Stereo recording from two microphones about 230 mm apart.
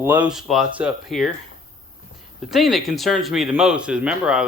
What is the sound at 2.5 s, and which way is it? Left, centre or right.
Speech, centre.